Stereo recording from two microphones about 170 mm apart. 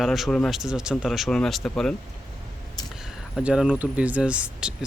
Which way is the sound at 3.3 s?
Centre (ahead or behind).